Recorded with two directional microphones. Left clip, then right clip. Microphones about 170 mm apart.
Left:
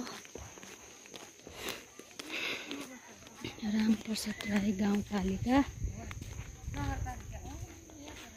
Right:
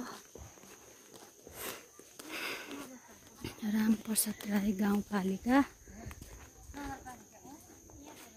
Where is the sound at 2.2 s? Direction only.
10° right (ahead or behind).